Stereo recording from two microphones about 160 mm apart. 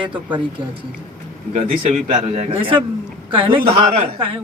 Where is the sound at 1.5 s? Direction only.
45° right (ahead or behind).